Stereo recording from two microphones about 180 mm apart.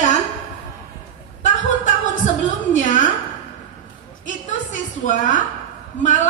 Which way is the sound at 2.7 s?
45° left (ahead or behind).